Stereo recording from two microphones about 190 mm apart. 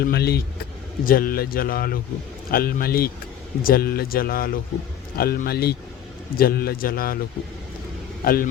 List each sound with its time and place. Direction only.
0.0 s speech: 55° left (ahead or behind)
8.2 s speech: 50° left (ahead or behind)